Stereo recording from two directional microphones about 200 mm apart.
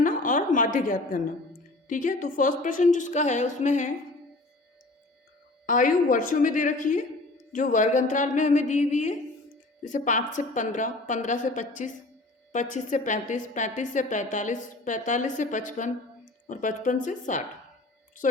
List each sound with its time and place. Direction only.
0.0 s a sound: 40° left (ahead or behind)
1.9 s a woman's voice: 40° left (ahead or behind)
5.6 s a woman's voice: 40° left (ahead or behind)